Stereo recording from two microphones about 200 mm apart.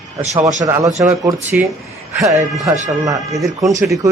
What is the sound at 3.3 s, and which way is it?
Speech, centre (ahead or behind).